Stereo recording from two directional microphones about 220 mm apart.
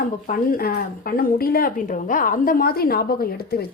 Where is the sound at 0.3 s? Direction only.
40° left (ahead or behind).